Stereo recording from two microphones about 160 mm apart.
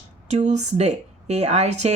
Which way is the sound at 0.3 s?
45° right (ahead or behind).